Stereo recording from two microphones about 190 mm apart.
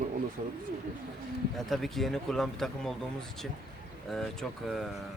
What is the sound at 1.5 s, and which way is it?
Speech, centre (ahead or behind).